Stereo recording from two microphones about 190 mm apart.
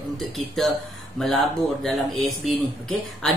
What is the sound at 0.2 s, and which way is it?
Speech, centre (ahead or behind).